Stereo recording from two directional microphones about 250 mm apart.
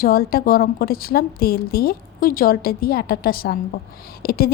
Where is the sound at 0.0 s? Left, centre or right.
Left.